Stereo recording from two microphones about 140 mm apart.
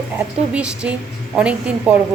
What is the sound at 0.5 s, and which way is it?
A woman's voice, 10° right (ahead or behind).